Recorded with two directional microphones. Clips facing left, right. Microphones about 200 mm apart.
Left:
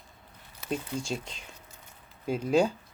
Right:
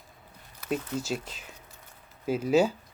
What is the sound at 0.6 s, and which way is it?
Speech, 5° right (ahead or behind).